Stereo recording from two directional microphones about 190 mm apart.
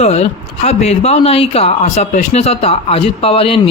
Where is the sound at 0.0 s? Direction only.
35° left (ahead or behind).